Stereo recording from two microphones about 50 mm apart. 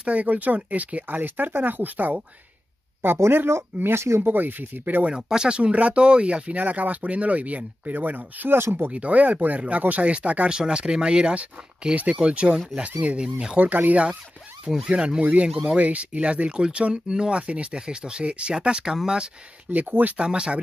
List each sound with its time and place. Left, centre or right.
0.0 s speech: right
3.2 s speech: right
4.3 s speech: right
5.0 s speech: centre; by 8.5 s right
8.5 s speech: right
8.9 s speech: right
13.6 s speech: right; by 19.3 s centre
19.7 s speech: right
20.2 s speech: centre